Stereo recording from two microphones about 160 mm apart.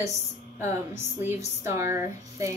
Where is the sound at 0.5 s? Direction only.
15° right (ahead or behind).